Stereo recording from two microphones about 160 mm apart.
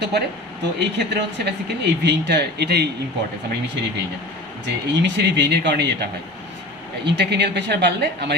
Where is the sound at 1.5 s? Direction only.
90° right.